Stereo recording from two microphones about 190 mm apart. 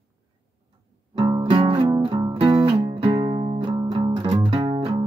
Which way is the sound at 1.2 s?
30° right (ahead or behind).